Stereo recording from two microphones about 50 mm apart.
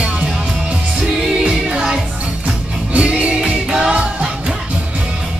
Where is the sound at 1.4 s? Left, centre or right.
Centre.